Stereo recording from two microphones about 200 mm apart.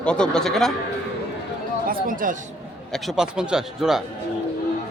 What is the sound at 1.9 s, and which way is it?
Speech, 45° right (ahead or behind).